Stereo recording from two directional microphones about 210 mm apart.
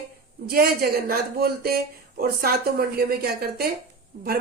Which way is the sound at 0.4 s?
45° right (ahead or behind).